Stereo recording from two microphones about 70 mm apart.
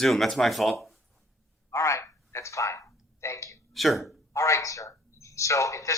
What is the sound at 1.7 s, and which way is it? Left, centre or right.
Telephone, left.